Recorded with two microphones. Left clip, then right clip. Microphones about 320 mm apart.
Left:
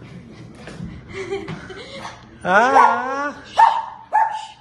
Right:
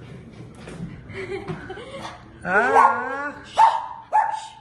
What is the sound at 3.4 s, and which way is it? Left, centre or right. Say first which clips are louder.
Dog: left 2 dB; centre.